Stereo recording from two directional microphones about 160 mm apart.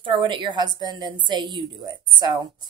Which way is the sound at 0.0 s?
30° right (ahead or behind).